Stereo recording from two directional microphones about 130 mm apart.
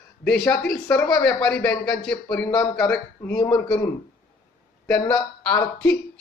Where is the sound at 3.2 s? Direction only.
15° left (ahead or behind).